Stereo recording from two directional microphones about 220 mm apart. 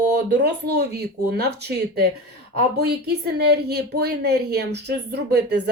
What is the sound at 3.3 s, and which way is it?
Speech, 50° right (ahead or behind).